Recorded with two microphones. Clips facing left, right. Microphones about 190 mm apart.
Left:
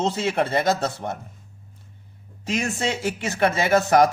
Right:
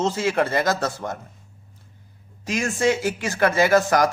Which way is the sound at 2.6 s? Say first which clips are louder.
Right 6 dB; 20° left (ahead or behind).